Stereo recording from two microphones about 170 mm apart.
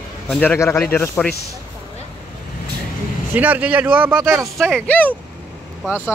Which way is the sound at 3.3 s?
10° right (ahead or behind).